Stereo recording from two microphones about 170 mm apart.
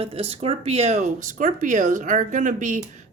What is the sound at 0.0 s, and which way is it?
A woman's voice, 35° right (ahead or behind).